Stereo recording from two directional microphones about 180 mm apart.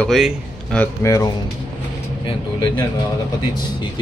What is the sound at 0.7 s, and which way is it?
Speech, 15° left (ahead or behind).